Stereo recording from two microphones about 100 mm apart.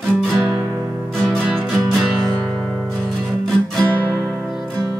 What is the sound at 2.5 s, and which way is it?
Guitar, 10° left (ahead or behind).